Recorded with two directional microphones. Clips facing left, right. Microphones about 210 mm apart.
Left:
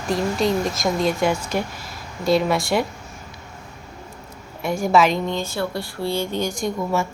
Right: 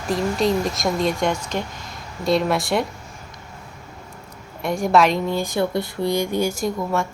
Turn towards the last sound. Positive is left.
turn(degrees=0)  # may be behind; listen again after turning